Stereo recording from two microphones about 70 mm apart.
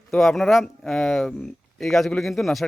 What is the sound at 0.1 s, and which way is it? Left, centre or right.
Speech, centre.